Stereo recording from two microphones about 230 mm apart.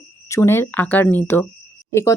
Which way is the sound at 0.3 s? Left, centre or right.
Centre.